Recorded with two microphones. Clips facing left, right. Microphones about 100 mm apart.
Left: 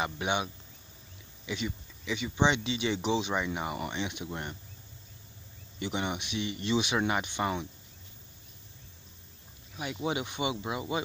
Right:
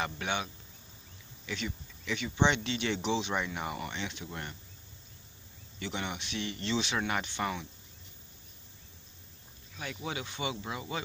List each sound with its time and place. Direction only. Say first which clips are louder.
0.0 s speech: left 3 dB; 15° left (ahead or behind)
5.8 s speech: left 4 dB; 15° left (ahead or behind)
10.0 s speech: left 5 dB; 20° left (ahead or behind)